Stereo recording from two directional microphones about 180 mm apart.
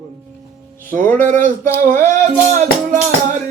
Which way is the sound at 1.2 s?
45° right (ahead or behind).